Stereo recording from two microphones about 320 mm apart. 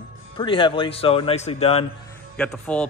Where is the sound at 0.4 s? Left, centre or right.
Centre.